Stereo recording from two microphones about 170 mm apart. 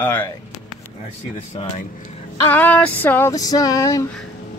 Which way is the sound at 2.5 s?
10° left (ahead or behind).